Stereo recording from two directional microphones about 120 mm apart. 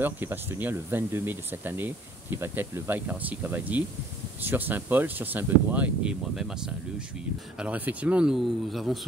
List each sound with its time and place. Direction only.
0.0 s speech: 15° right (ahead or behind); by 9.0 s centre (ahead or behind)